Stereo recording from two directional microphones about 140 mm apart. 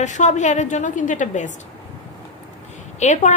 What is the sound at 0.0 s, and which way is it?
A woman's voice, 60° left (ahead or behind).